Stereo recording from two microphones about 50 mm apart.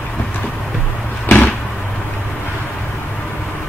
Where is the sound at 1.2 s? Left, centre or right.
Left.